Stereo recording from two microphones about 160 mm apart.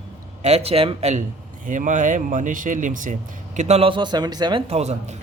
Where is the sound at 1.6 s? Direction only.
55° right (ahead or behind); by 4.6 s 25° right (ahead or behind).